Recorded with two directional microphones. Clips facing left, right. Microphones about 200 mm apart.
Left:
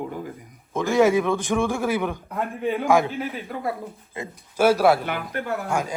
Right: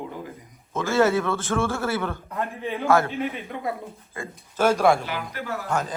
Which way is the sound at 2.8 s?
15° left (ahead or behind).